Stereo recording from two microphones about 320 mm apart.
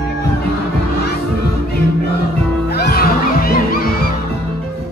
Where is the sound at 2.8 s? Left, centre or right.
Left.